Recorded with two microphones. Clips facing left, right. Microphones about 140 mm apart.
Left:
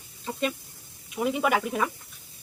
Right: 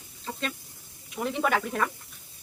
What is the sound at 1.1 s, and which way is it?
Speech, 10° left (ahead or behind).